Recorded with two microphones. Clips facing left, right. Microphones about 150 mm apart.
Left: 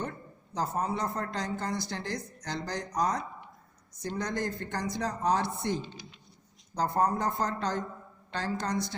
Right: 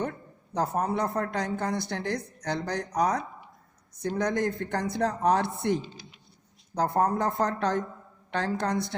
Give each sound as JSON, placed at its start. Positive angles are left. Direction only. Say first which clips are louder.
{"t": 0.0, "sound": "speech", "louder": "right 5 dB", "side_deg": -60}
{"t": 6.7, "sound": "speech", "louder": "right 3 dB", "side_deg": -55}